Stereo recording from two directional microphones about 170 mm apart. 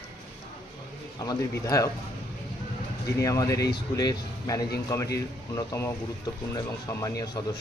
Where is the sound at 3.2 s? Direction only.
20° left (ahead or behind).